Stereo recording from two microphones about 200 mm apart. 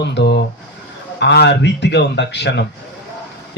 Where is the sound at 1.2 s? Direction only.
55° left (ahead or behind).